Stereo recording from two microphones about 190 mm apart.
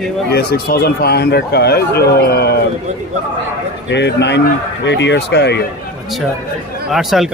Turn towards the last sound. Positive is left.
turn(degrees=0)  # may be behind; listen again after turning